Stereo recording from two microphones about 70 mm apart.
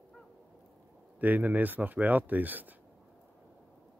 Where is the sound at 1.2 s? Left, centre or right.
Right.